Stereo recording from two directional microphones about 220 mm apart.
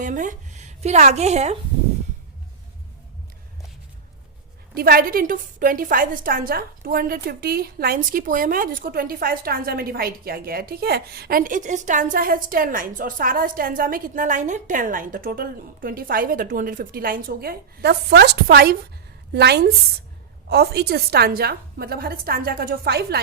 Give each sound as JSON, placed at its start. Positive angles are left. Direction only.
{"t": 0.0, "sound": "a woman's voice", "side_deg": -35}
{"t": 4.7, "sound": "a woman's voice", "side_deg": -45}